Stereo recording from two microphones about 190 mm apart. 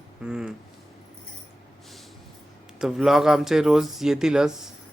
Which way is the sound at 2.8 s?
Centre (ahead or behind).